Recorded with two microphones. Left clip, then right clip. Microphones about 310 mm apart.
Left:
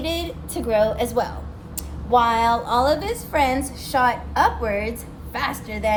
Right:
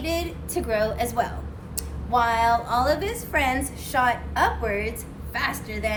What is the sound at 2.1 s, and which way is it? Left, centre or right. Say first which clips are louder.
A woman's voice: left 3 dB; centre.